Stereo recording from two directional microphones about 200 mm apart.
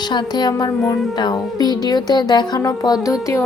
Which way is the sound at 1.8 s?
20° left (ahead or behind).